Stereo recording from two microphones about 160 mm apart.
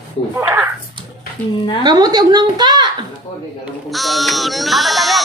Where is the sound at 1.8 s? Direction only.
25° right (ahead or behind).